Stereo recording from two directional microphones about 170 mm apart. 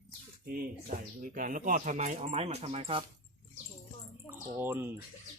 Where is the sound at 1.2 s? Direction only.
55° right (ahead or behind); by 3.0 s 35° right (ahead or behind).